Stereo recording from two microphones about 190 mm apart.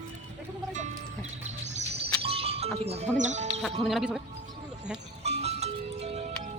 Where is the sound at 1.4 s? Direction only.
35° right (ahead or behind).